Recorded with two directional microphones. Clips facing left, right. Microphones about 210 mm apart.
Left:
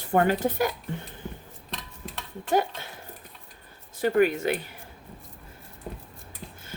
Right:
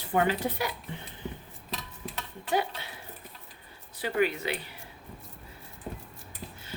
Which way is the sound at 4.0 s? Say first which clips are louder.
Left 6 dB; 45° left (ahead or behind).